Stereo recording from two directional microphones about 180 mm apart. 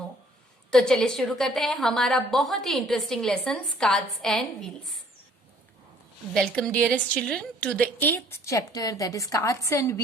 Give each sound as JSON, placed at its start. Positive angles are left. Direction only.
{"t": 0.7, "sound": "a woman's voice", "side_deg": 5}
{"t": 6.3, "sound": "a woman's voice", "side_deg": 5}